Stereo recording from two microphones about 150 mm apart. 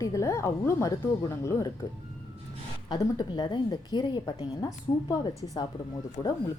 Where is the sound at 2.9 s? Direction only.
30° left (ahead or behind).